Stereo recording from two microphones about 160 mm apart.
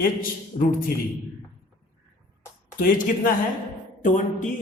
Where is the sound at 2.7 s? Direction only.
55° left (ahead or behind).